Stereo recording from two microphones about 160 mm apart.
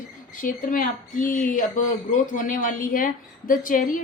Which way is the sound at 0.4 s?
60° left (ahead or behind).